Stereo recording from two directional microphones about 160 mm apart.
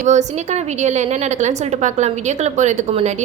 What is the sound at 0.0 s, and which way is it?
A woman's voice, 45° right (ahead or behind).